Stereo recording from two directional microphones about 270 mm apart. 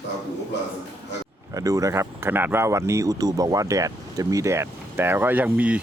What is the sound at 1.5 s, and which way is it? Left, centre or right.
Speech, centre.